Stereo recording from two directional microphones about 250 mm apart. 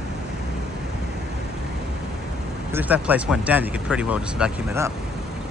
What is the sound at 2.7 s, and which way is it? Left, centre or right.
Speech, centre.